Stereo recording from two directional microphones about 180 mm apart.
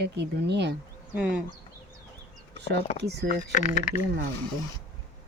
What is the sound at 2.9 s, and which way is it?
Speech, 35° left (ahead or behind).